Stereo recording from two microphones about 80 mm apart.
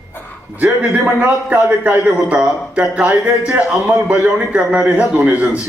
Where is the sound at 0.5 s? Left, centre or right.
Right.